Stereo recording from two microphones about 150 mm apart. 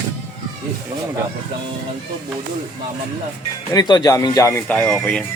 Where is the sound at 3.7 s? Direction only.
30° left (ahead or behind).